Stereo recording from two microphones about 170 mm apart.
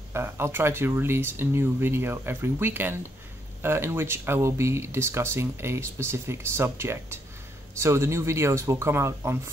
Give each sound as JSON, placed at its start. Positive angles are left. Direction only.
{"t": 0.1, "sound": "speech", "side_deg": -15}